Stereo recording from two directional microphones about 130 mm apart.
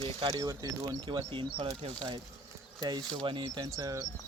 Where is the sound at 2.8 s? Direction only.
35° right (ahead or behind).